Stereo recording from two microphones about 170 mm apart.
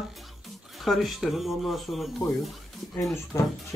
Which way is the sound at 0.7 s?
Centre (ahead or behind).